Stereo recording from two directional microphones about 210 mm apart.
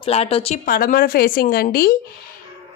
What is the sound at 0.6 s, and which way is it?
A woman's voice, 45° left (ahead or behind).